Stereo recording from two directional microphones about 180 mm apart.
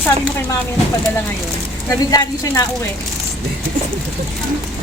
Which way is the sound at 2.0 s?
20° left (ahead or behind).